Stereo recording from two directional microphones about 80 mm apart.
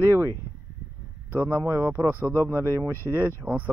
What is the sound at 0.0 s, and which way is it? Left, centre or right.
Speech, right.